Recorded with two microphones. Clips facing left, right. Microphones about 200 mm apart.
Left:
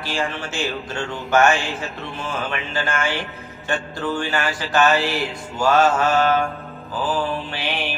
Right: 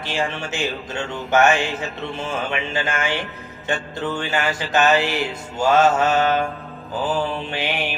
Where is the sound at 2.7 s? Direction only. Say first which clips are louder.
Even; 20° right (ahead or behind).